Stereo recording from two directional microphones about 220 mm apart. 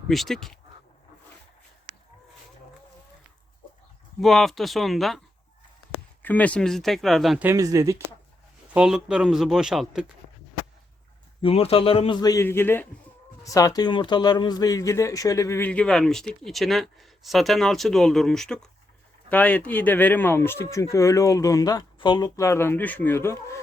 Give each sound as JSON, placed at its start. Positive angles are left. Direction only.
{"t": 0.1, "sound": "speech", "side_deg": 0}
{"t": 4.2, "sound": "speech", "side_deg": 0}
{"t": 6.2, "sound": "speech", "side_deg": 5}
{"t": 8.7, "sound": "speech", "side_deg": -5}
{"t": 11.4, "sound": "a man's voice", "side_deg": 25}